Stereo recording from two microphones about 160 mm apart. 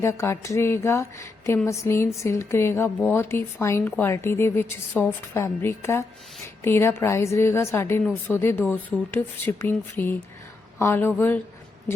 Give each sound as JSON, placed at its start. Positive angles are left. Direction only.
{"t": 0.0, "sound": "a woman's voice", "side_deg": 15}